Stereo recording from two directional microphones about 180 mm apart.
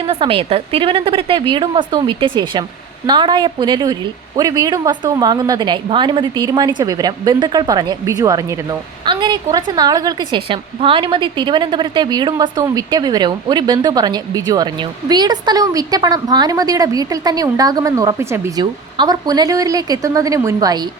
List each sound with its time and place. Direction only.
0.1 s a woman's voice: 30° right (ahead or behind)